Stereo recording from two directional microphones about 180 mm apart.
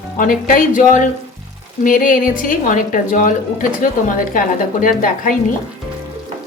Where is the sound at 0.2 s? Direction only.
50° left (ahead or behind).